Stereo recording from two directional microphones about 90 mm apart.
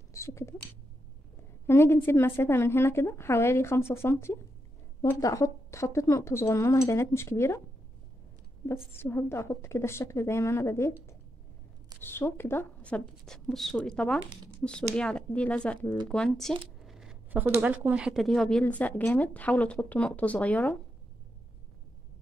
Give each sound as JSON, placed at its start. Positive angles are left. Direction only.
{"t": 0.1, "sound": "speech", "side_deg": 35}
{"t": 1.7, "sound": "a woman's voice", "side_deg": 30}
{"t": 8.9, "sound": "a woman's voice", "side_deg": 30}
{"t": 12.0, "sound": "a woman's voice", "side_deg": 25}
{"t": 12.8, "sound": "speech", "side_deg": 10}
{"t": 16.8, "sound": "coin", "side_deg": -5}
{"t": 17.3, "sound": "speech", "side_deg": -20}
{"t": 18.1, "sound": "speech", "side_deg": 5}
{"t": 18.6, "sound": "speech", "side_deg": 15}